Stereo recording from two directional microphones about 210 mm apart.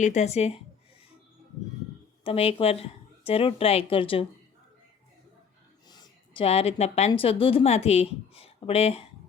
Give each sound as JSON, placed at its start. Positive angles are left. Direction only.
{"t": 0.0, "sound": "a woman's voice", "side_deg": 35}
{"t": 2.2, "sound": "speech", "side_deg": 25}
{"t": 5.9, "sound": "a woman's voice", "side_deg": 20}